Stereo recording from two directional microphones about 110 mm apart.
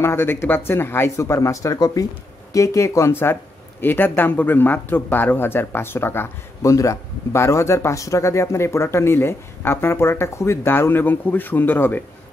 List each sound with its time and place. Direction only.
0.0 s speech: 20° left (ahead or behind)